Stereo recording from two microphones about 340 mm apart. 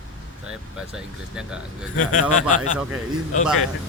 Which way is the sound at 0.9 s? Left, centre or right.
Centre.